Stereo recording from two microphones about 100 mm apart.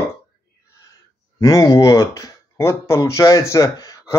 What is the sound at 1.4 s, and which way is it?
Speech, 35° left (ahead or behind).